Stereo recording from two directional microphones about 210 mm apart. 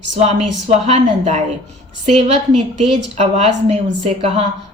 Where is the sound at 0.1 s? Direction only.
30° right (ahead or behind).